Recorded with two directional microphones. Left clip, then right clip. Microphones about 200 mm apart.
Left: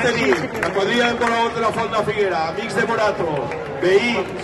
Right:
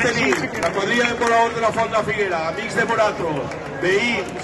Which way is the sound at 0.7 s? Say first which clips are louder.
Left 1 dB; 45° left (ahead or behind).